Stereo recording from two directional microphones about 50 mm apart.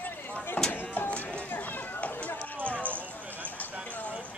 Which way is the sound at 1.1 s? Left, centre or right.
Left.